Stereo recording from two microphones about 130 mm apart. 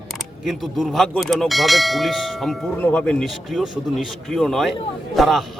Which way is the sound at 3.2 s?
Centre (ahead or behind).